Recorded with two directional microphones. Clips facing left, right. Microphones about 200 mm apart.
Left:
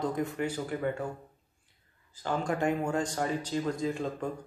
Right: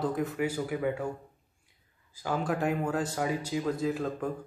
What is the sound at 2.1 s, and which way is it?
Speech, 5° right (ahead or behind).